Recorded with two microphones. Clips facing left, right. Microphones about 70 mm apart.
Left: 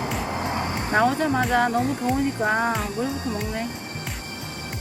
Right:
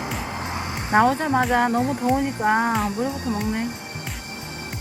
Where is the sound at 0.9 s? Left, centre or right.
Right.